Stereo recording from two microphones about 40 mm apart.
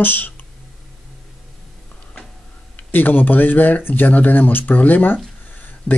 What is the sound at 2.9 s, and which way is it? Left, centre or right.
Speech, left.